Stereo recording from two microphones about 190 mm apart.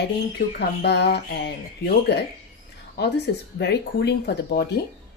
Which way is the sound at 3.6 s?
60° left (ahead or behind).